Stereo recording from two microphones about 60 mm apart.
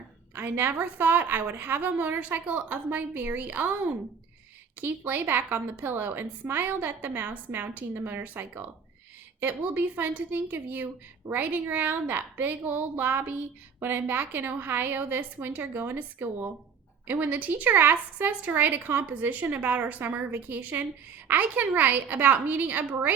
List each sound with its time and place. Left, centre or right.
0.3 s a woman's voice: right